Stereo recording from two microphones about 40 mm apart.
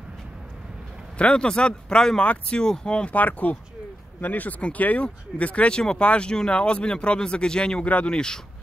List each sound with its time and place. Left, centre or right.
1.1 s speech: left
3.1 s speech: left; by 8.4 s centre